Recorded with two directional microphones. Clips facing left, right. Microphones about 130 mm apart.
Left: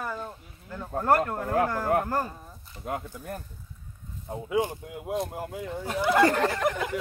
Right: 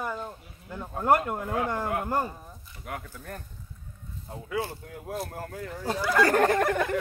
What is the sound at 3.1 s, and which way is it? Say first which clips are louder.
Speech: left 3 dB; 15° left (ahead or behind).